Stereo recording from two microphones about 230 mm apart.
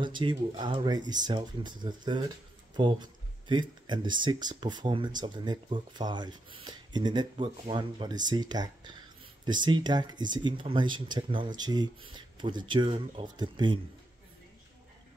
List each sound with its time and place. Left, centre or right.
0.0 s speech: right